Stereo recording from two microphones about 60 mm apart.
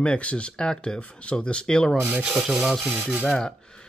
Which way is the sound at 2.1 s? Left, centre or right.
Right.